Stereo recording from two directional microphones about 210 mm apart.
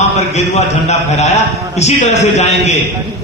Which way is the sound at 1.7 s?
30° left (ahead or behind).